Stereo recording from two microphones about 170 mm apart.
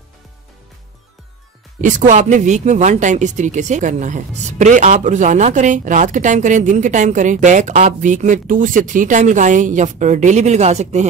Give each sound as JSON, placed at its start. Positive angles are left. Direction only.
{"t": 1.8, "sound": "speech", "side_deg": -50}